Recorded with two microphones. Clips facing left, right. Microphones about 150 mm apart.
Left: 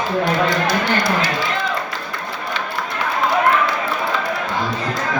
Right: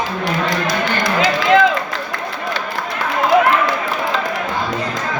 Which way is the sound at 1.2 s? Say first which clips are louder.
Right 9 dB; 90° right.